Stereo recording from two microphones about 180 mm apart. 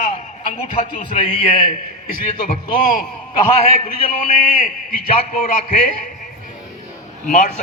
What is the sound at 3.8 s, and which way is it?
A man's voice, 45° left (ahead or behind).